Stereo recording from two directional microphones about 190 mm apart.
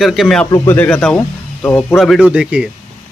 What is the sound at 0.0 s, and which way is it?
Speech, centre (ahead or behind).